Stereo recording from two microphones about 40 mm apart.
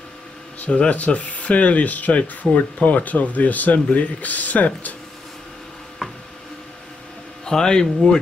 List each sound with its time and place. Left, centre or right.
0.6 s speech: left
7.4 s speech: centre